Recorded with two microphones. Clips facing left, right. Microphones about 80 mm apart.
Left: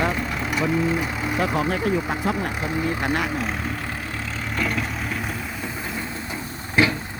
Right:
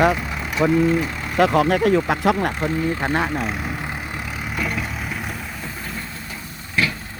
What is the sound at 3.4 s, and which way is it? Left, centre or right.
Speech, centre.